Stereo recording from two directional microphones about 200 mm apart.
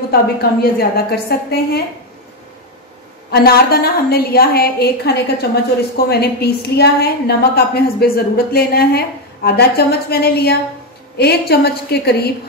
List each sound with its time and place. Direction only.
0.1 s a woman's voice: 50° left (ahead or behind)
3.3 s a woman's voice: 50° left (ahead or behind)